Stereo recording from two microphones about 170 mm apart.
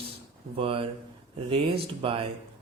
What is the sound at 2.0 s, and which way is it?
Speech, 35° right (ahead or behind).